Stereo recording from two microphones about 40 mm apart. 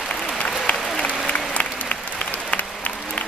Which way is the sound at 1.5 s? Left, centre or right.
Left.